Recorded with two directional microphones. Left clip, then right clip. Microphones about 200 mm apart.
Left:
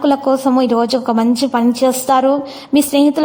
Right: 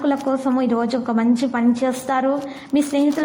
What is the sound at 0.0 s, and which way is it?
A woman's voice, 40° left (ahead or behind).